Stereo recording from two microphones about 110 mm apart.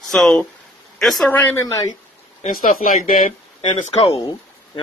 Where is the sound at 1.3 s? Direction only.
15° left (ahead or behind).